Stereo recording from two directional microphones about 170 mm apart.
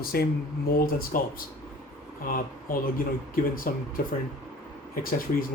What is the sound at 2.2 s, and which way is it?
Speech, 55° left (ahead or behind).